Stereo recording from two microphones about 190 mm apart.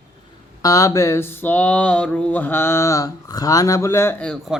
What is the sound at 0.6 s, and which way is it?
Speech, 15° left (ahead or behind).